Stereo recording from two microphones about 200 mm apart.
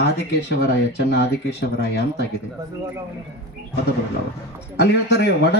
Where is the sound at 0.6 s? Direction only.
55° left (ahead or behind).